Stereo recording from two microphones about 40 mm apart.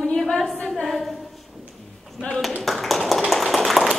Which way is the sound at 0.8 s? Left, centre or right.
Centre.